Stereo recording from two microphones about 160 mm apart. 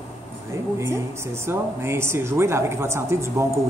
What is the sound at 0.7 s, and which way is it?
A woman's voice, 20° right (ahead or behind).